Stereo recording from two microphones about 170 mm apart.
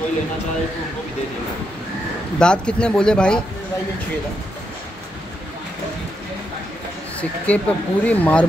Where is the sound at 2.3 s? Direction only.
5° left (ahead or behind).